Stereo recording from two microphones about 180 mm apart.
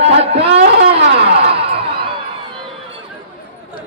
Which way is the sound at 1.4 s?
30° right (ahead or behind).